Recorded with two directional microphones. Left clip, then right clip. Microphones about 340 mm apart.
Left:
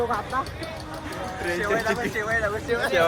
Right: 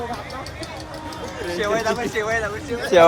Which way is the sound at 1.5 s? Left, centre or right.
Centre.